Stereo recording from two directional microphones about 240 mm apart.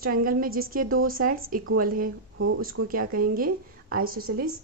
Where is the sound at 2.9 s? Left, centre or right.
Right.